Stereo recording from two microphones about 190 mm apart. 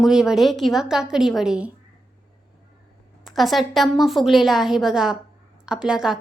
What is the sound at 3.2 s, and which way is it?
A woman's voice, centre (ahead or behind).